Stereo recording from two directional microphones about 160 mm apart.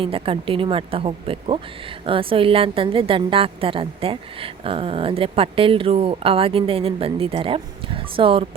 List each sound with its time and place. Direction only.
0.0 s a woman's voice: 35° right (ahead or behind)